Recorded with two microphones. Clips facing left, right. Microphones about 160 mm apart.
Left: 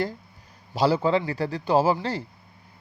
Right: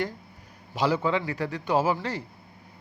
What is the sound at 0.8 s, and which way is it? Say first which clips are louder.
A man's voice: left 4 dB; 35° left (ahead or behind).